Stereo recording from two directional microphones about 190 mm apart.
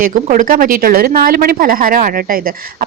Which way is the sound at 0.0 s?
45° right (ahead or behind).